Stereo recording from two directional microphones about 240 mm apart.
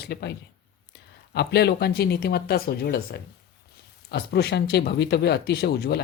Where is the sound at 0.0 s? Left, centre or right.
Left.